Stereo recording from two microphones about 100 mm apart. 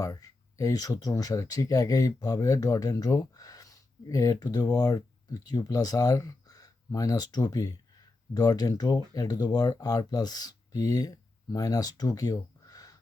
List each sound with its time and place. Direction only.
0.0 s speech: 35° left (ahead or behind)